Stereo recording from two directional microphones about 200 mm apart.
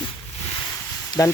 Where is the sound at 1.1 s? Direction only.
20° left (ahead or behind).